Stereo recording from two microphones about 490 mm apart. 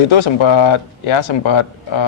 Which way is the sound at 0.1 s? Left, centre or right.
Left.